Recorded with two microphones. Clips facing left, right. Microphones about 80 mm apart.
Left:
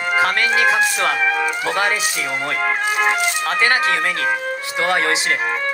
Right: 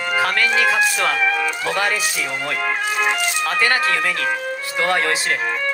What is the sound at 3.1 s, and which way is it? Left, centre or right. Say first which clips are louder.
Music: left 2 dB; left.